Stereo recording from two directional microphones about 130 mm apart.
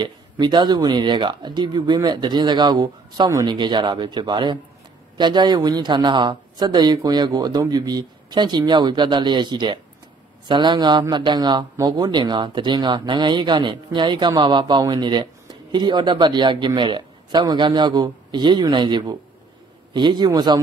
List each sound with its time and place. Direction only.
0.0 s a man's voice: 35° right (ahead or behind)